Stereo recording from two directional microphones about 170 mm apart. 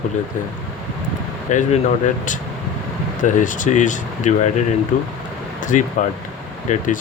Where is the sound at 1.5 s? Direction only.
45° left (ahead or behind).